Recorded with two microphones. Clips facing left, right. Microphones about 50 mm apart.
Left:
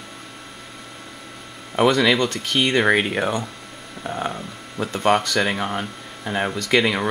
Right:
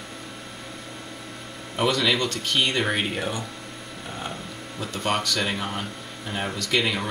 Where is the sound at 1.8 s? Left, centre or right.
Left.